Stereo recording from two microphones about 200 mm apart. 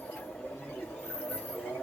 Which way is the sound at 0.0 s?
5° left (ahead or behind).